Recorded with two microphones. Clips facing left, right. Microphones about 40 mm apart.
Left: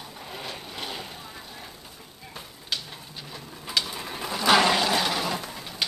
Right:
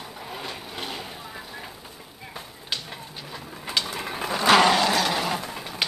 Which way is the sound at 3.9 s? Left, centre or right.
Right.